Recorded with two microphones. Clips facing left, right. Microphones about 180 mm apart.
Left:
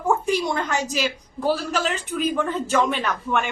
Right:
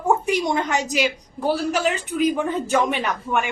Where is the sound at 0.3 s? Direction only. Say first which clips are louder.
Right 2 dB; 20° right (ahead or behind).